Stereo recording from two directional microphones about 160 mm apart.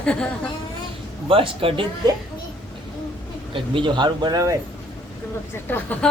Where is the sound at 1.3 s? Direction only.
35° right (ahead or behind).